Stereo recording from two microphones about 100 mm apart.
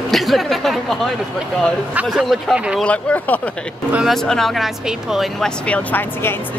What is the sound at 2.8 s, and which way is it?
A woman's voice, 15° left (ahead or behind).